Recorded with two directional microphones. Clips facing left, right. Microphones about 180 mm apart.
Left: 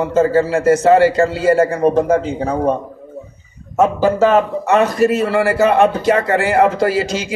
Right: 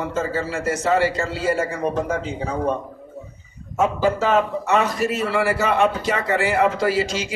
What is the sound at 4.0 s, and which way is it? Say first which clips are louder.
A man's voice: left 5 dB; 50° left (ahead or behind).